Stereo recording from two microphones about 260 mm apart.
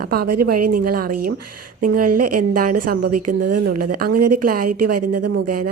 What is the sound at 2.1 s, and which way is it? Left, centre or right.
Speech, right.